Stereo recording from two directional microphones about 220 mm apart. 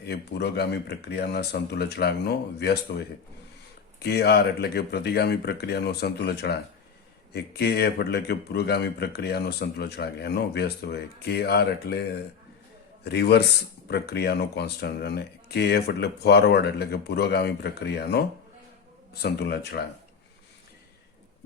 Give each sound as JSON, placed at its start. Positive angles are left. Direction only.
{"t": 0.0, "sound": "a man's voice", "side_deg": 45}
{"t": 4.0, "sound": "a man's voice", "side_deg": 50}
{"t": 19.2, "sound": "a man's voice", "side_deg": 45}